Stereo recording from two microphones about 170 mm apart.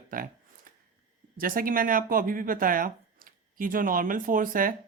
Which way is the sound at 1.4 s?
55° right (ahead or behind).